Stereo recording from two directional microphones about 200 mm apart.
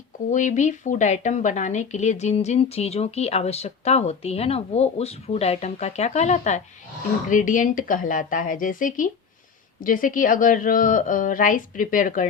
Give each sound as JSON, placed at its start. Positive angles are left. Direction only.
{"t": 0.3, "sound": "speech", "side_deg": 40}